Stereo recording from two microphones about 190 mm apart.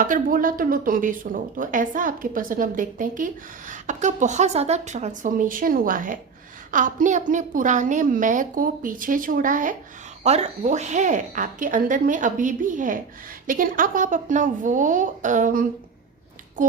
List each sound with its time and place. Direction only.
0.0 s speech: 45° right (ahead or behind)